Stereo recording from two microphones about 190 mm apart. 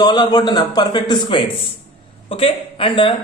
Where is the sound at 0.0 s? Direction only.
20° left (ahead or behind).